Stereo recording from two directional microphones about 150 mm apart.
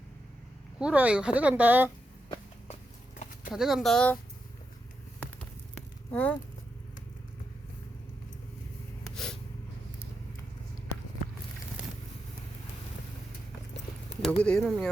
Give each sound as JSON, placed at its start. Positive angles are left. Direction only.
{"t": 0.8, "sound": "a woman's voice", "side_deg": -5}
{"t": 3.5, "sound": "speech", "side_deg": 0}
{"t": 5.2, "sound": "a sound", "side_deg": 10}
{"t": 9.1, "sound": "snort", "side_deg": 5}
{"t": 14.3, "sound": "speech", "side_deg": 5}